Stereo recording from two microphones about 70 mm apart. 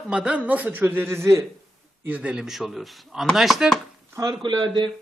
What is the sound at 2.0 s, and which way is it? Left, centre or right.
Speech, centre.